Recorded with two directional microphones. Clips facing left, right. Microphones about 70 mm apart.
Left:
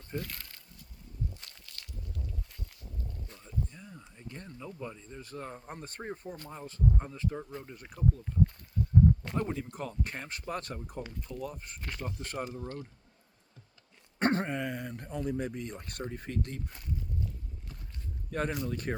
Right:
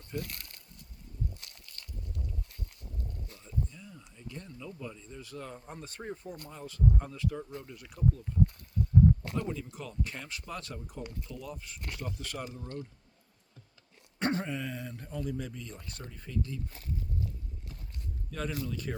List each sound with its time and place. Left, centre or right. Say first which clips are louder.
0.1 s speech: even; left
3.7 s speech: left 1 dB; left
7.8 s speech: even; left
9.3 s speech: left 2 dB; left
14.2 s speech: left 3 dB; left
18.3 s speech: left 3 dB; left